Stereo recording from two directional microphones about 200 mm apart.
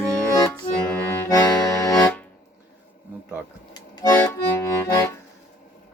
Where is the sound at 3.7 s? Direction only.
20° left (ahead or behind).